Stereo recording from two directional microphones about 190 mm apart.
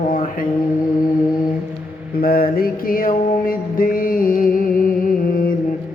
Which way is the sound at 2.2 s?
50° left (ahead or behind).